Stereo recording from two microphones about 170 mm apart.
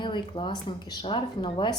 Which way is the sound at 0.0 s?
25° left (ahead or behind).